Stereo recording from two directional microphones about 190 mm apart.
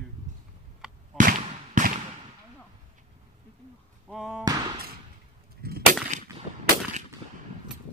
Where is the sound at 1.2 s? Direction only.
40° right (ahead or behind).